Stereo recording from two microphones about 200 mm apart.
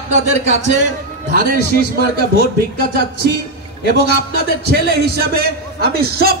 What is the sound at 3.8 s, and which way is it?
A man's voice, 50° right (ahead or behind).